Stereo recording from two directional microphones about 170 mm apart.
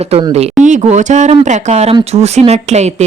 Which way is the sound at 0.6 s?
45° right (ahead or behind).